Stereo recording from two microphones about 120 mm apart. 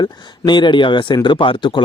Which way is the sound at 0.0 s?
40° left (ahead or behind).